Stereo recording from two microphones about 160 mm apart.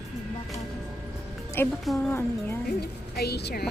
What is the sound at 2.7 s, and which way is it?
Speech, 90° left.